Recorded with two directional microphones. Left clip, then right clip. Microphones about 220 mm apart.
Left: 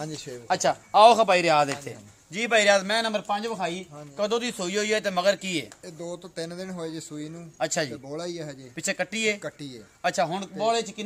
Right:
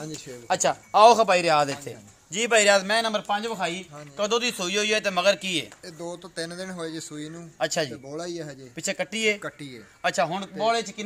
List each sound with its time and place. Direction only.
0.5 s a man's voice: 20° right (ahead or behind); by 3.3 s 5° right (ahead or behind)
3.5 s a man's voice: 5° left (ahead or behind)
5.9 s a man's voice: 25° left (ahead or behind)
7.5 s speech: centre (ahead or behind)
8.1 s a man's voice: 10° left (ahead or behind)
8.7 s speech: 5° right (ahead or behind)
9.4 s speech: 20° left (ahead or behind)
10.0 s speech: centre (ahead or behind)